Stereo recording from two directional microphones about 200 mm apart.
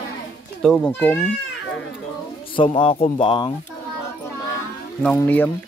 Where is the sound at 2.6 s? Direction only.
25° left (ahead or behind).